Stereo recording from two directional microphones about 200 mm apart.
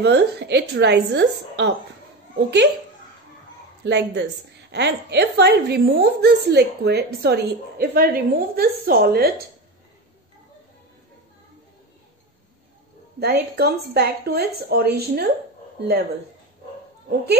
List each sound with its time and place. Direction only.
0.0 s a woman's voice: 60° right (ahead or behind)
3.8 s a woman's voice: 60° right (ahead or behind)
13.2 s a woman's voice: 55° right (ahead or behind)